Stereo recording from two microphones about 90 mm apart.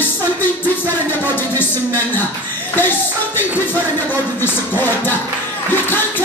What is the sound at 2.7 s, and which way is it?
Speech, 25° left (ahead or behind).